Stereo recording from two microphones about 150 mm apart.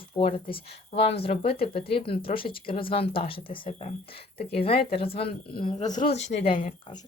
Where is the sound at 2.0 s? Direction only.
80° left.